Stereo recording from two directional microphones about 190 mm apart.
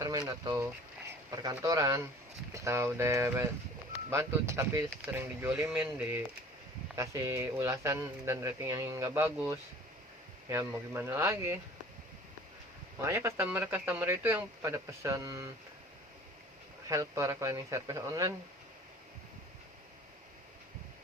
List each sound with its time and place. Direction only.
0.0 s a sound: 20° right (ahead or behind)
1.4 s speech: 20° right (ahead or behind)
10.9 s speech: 10° right (ahead or behind)
13.0 s speech: 15° right (ahead or behind)
16.9 s speech: 15° right (ahead or behind)